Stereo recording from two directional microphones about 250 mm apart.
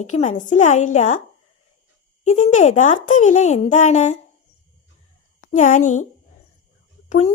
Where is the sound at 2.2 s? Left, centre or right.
Left.